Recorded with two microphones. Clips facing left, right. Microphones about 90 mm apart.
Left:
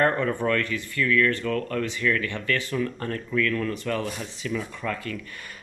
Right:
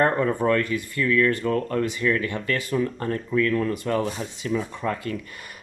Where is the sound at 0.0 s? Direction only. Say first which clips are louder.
Right 2 dB; 15° right (ahead or behind).